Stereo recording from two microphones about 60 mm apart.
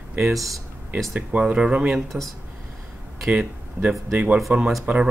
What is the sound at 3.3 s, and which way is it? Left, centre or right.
Speech, right.